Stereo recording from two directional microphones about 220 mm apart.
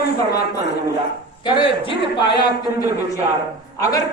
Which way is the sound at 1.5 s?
20° left (ahead or behind).